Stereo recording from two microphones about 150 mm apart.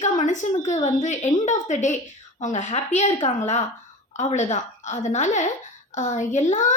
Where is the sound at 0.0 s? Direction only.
55° left (ahead or behind).